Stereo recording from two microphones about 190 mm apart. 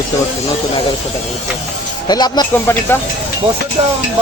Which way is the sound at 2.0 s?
20° left (ahead or behind).